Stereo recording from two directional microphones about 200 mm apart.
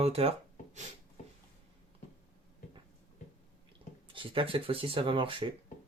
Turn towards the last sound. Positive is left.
turn(degrees=-25)  # may be behind; listen again after turning